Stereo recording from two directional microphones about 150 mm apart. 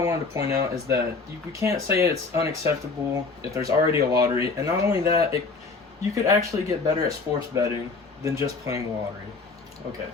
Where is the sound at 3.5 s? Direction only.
20° right (ahead or behind).